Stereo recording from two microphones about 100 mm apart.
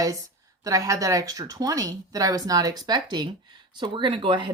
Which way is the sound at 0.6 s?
35° right (ahead or behind).